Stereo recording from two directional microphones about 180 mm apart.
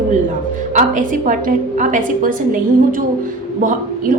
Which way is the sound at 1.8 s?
45° right (ahead or behind).